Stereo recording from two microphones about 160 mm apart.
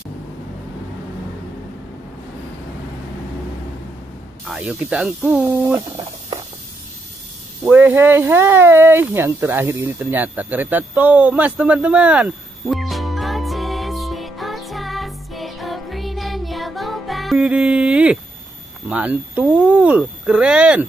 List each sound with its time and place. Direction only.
4.5 s speech: 5° right (ahead or behind)
5.7 s speech: 20° right (ahead or behind)
7.6 s a sound: 10° right (ahead or behind)
18.9 s speech: 10° right (ahead or behind)